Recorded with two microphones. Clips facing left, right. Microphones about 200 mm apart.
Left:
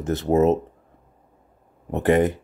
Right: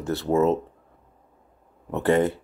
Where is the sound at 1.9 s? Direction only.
15° left (ahead or behind).